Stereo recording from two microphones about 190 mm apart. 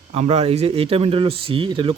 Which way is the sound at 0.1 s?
35° right (ahead or behind).